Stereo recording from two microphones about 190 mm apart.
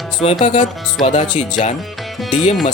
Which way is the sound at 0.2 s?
25° left (ahead or behind).